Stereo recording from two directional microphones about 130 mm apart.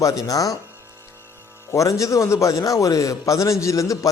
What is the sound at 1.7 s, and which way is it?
A man's voice, 25° left (ahead or behind).